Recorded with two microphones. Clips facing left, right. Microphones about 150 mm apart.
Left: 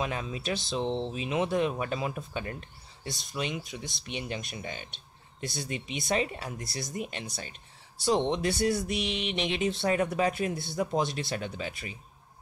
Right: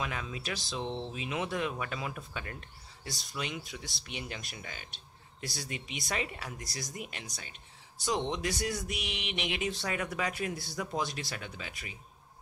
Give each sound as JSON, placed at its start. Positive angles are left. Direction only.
{"t": 0.0, "sound": "speech", "side_deg": 30}